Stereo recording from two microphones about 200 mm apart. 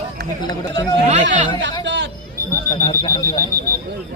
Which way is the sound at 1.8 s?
65° right (ahead or behind).